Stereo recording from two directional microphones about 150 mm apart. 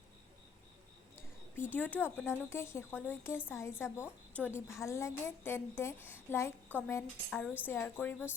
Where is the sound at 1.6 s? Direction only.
10° left (ahead or behind).